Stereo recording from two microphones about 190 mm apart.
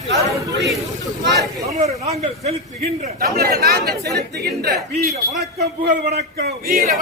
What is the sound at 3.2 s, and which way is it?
A man's voice, 55° right (ahead or behind).